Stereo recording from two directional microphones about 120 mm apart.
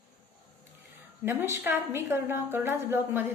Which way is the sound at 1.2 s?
20° right (ahead or behind).